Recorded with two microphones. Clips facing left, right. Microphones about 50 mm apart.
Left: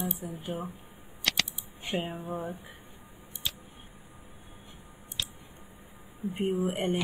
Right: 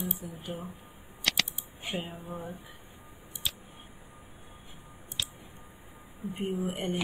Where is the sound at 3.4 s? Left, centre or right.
Centre.